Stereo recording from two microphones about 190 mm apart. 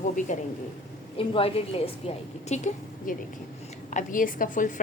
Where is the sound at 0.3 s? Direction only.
40° left (ahead or behind).